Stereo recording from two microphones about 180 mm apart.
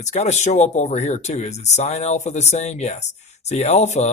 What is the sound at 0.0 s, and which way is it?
Speech, 40° left (ahead or behind).